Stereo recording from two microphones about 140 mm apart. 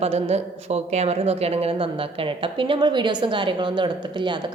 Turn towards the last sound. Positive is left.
turn(degrees=-35)  # may be behind; listen again after turning